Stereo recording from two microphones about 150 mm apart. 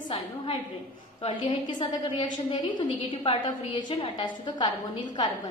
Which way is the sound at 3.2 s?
35° left (ahead or behind).